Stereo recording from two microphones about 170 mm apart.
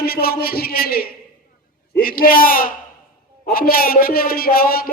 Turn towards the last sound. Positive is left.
turn(degrees=60)  # may be behind; listen again after turning